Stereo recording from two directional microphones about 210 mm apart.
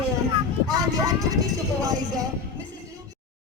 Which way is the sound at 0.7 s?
15° right (ahead or behind).